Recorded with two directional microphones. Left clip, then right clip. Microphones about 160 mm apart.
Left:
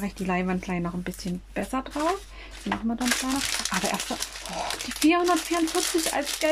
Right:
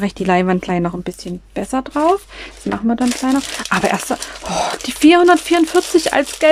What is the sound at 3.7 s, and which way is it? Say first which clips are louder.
Speech: right 11 dB; 60° right (ahead or behind).